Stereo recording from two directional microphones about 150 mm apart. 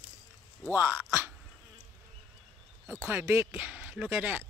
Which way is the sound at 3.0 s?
15° right (ahead or behind).